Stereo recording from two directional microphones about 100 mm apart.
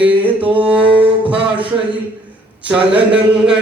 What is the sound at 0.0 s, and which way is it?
Music, 15° right (ahead or behind).